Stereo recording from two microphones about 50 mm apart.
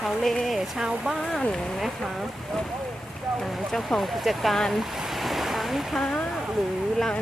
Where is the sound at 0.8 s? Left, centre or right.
Centre.